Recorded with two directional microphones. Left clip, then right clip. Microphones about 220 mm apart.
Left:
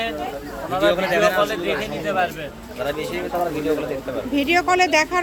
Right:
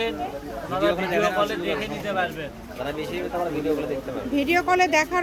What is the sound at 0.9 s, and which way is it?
Speech, 25° left (ahead or behind).